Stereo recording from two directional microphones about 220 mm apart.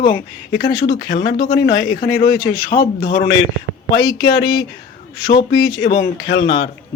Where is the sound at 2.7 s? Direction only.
50° left (ahead or behind).